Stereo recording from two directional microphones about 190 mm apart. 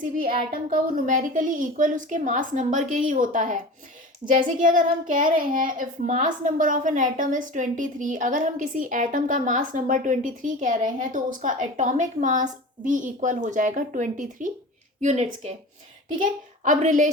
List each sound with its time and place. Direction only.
0.0 s a woman's voice: 45° right (ahead or behind)